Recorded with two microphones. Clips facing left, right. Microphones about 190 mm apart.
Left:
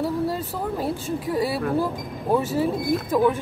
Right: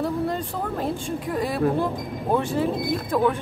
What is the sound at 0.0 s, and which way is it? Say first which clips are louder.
Speech: left 1 dB; 5° left (ahead or behind).